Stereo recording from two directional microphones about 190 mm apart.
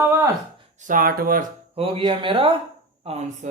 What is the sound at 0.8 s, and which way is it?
Speech, 45° right (ahead or behind).